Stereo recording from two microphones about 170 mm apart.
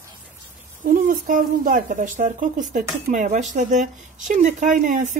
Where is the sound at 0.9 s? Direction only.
50° right (ahead or behind).